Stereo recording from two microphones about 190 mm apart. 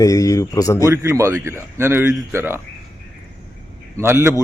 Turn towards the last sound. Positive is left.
turn(degrees=-15)  # may be behind; listen again after turning